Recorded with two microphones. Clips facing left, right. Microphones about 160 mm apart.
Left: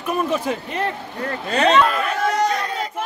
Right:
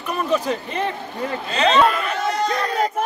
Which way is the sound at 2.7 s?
45° right (ahead or behind).